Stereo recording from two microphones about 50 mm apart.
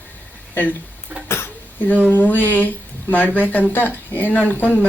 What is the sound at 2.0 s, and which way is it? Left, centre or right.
A woman's voice, left.